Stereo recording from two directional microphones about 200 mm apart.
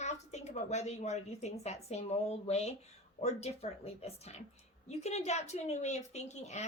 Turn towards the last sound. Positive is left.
turn(degrees=35)  # may be behind; listen again after turning